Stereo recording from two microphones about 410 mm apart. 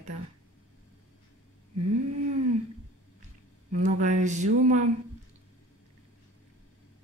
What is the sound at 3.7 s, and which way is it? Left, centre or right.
A man's voice, centre.